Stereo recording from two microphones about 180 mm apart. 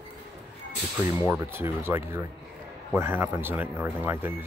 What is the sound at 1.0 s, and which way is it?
Speech, 15° right (ahead or behind).